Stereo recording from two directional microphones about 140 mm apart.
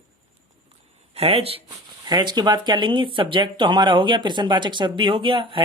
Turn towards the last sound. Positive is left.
turn(degrees=-40)  # may be behind; listen again after turning